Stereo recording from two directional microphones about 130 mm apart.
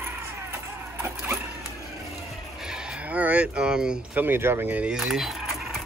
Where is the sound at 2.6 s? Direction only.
5° right (ahead or behind).